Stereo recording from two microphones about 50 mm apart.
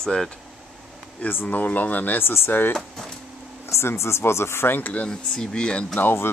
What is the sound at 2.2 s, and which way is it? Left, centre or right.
Speech, left.